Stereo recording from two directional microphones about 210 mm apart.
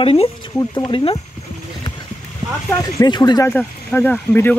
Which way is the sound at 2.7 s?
15° left (ahead or behind).